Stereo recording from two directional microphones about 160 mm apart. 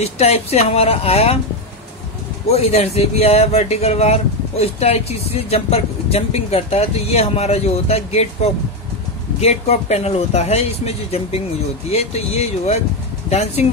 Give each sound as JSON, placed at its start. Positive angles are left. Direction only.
{"t": 0.0, "sound": "speech", "side_deg": 40}
{"t": 2.5, "sound": "speech", "side_deg": 40}